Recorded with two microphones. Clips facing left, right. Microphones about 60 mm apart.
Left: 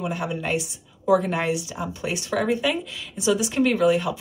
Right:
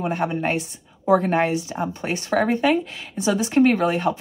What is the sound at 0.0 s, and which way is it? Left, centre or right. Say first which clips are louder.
A woman's voice: right 4 dB; right.